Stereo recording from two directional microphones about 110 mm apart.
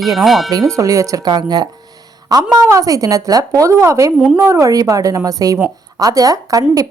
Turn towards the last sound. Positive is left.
turn(degrees=-35)  # may be behind; listen again after turning